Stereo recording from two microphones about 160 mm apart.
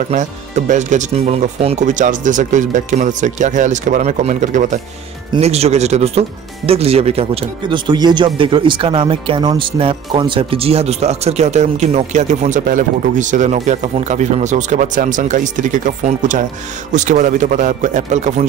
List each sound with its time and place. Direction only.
0.1 s speech: 50° right (ahead or behind)
5.3 s speech: 40° right (ahead or behind)